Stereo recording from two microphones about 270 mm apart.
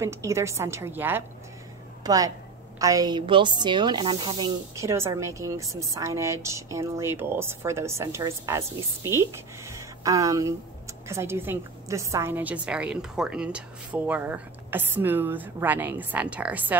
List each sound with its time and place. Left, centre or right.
0.0 s a woman's voice: centre